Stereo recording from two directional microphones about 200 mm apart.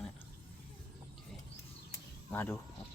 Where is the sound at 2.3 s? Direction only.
10° left (ahead or behind).